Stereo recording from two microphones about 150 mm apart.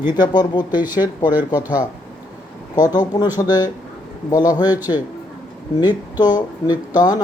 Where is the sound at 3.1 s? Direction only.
25° left (ahead or behind).